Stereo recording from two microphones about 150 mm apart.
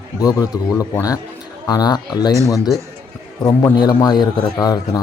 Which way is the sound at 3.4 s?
25° left (ahead or behind).